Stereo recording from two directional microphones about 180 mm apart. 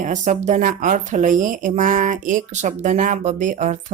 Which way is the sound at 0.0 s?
45° right (ahead or behind).